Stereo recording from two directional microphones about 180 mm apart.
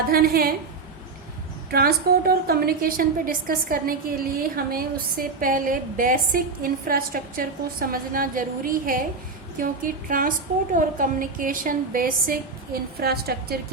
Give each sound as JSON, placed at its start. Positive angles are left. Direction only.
{"t": 0.1, "sound": "a woman's voice", "side_deg": -55}
{"t": 1.7, "sound": "a woman's voice", "side_deg": -55}